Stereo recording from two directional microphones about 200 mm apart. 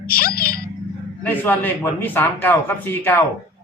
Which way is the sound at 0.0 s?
45° left (ahead or behind).